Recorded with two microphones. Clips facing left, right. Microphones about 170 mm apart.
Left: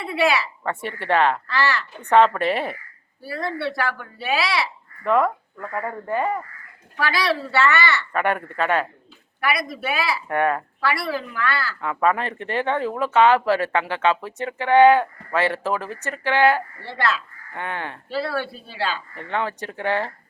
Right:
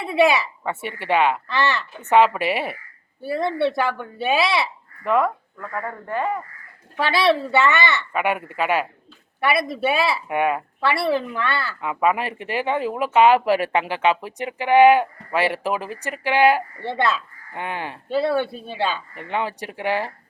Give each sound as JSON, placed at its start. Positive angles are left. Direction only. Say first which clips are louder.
{"t": 0.0, "sound": "a woman's voice", "louder": "right 3 dB", "side_deg": -20}
{"t": 0.6, "sound": "speech", "louder": "even", "side_deg": -5}
{"t": 1.5, "sound": "speech", "louder": "right 1 dB", "side_deg": -20}
{"t": 2.0, "sound": "speech", "louder": "even", "side_deg": -5}
{"t": 3.2, "sound": "speech", "louder": "right 6 dB", "side_deg": -20}
{"t": 5.0, "sound": "speech", "louder": "left 1 dB", "side_deg": -5}
{"t": 5.5, "sound": "speech", "louder": "left 1 dB", "side_deg": 10}
{"t": 6.9, "sound": "speech", "louder": "right 4 dB", "side_deg": -25}
{"t": 8.1, "sound": "speech", "louder": "even", "side_deg": -5}
{"t": 9.4, "sound": "speech", "louder": "right 4 dB", "side_deg": -25}
{"t": 10.2, "sound": "speech", "louder": "even", "side_deg": -10}
{"t": 10.8, "sound": "speech", "louder": "right 4 dB", "side_deg": -25}
{"t": 11.8, "sound": "speech", "louder": "even", "side_deg": -10}